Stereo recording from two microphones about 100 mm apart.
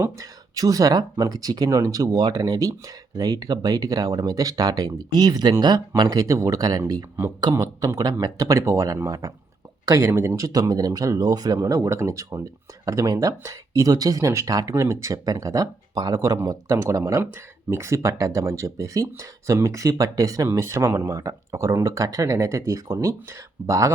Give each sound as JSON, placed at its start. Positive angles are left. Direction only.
{"t": 0.0, "sound": "speech", "side_deg": -35}